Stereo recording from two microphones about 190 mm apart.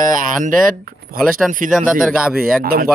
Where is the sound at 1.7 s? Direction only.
5° right (ahead or behind).